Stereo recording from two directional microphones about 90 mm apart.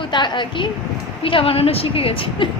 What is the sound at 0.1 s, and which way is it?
Speech, 60° left (ahead or behind).